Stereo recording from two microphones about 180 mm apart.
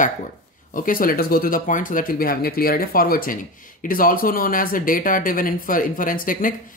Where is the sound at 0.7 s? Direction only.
50° left (ahead or behind).